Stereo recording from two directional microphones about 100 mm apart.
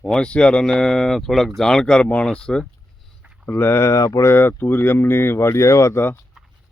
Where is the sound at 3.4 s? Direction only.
25° left (ahead or behind).